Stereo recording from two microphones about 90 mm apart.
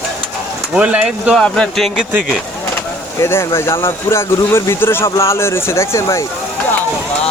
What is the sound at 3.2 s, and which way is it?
Speech, 30° left (ahead or behind).